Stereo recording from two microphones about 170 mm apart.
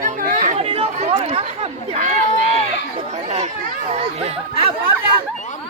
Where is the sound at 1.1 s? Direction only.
40° right (ahead or behind).